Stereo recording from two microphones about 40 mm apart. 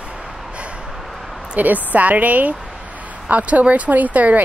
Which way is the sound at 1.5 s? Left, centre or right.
Right.